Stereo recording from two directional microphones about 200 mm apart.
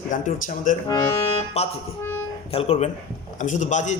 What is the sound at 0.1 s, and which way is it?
A man's voice, 40° left (ahead or behind).